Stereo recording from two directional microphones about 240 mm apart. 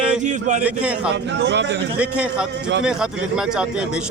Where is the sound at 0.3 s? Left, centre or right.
Right.